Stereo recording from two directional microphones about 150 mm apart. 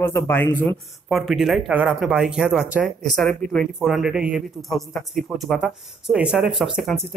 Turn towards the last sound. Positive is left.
turn(degrees=0)  # may be behind; listen again after turning